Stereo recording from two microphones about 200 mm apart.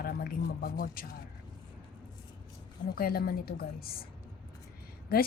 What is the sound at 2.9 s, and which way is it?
Speech, 50° left (ahead or behind).